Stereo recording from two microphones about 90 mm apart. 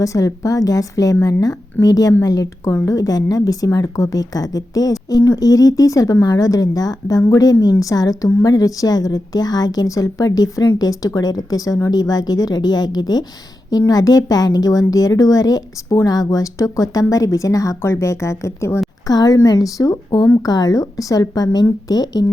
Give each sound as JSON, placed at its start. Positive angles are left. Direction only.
{"t": 0.0, "sound": "speech", "side_deg": 35}
{"t": 19.0, "sound": "speech", "side_deg": 45}